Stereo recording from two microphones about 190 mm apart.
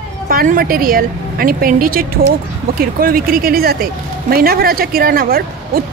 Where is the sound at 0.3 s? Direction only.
50° right (ahead or behind).